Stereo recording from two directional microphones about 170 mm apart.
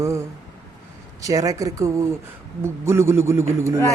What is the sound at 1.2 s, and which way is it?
A man's voice, 20° right (ahead or behind).